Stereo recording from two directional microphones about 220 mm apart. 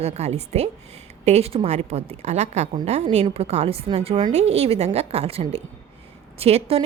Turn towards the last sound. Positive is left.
turn(degrees=-25)  # may be behind; listen again after turning